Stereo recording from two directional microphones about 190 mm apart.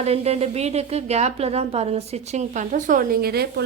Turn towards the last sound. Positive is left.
turn(degrees=-55)  # may be behind; listen again after turning